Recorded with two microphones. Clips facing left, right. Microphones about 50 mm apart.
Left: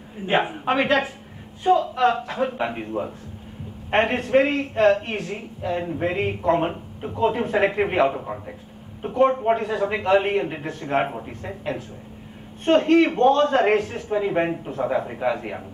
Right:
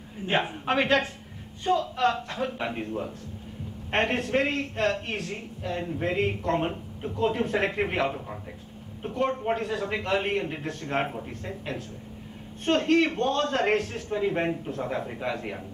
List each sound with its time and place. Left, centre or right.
0.3 s a man's voice: centre
7.2 s a man's voice: centre